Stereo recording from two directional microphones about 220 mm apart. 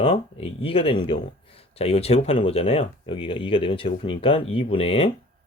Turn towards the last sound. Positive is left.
turn(degrees=25)  # may be behind; listen again after turning